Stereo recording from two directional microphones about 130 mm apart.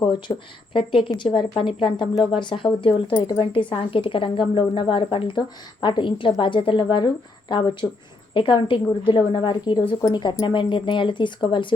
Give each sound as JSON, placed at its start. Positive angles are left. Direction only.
{"t": 0.0, "sound": "speech", "side_deg": 40}